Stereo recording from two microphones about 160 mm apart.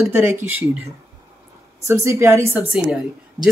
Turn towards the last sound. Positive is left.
turn(degrees=-5)  # may be behind; listen again after turning